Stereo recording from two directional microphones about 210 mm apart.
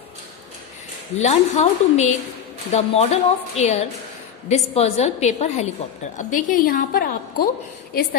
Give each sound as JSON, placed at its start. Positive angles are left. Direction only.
{"t": 1.2, "sound": "a woman's voice", "side_deg": 30}